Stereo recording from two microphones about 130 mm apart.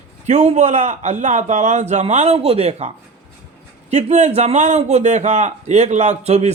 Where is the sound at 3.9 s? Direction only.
60° right (ahead or behind).